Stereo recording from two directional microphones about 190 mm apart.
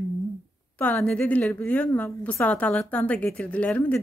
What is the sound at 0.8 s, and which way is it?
A woman's voice, 5° left (ahead or behind).